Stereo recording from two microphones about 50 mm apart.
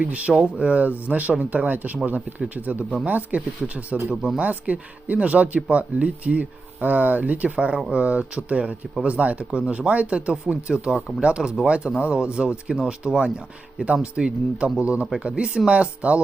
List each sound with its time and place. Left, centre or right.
0.0 s speech: right
3.9 s speech: centre
4.4 s speech: right
12.7 s speech: centre